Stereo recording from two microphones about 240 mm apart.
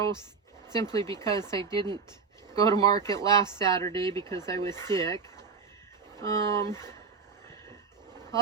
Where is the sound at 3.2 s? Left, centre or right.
Centre.